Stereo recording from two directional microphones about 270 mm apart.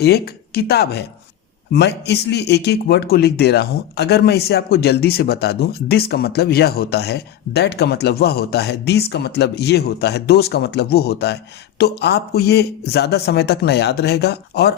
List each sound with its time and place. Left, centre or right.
0.0 s a man's voice: left